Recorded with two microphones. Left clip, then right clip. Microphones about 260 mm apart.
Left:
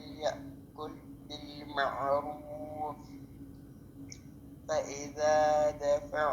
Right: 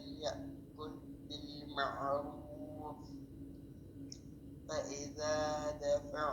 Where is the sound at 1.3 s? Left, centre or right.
Left.